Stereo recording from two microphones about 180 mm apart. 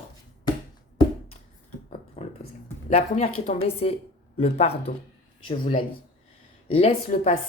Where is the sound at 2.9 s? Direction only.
35° left (ahead or behind).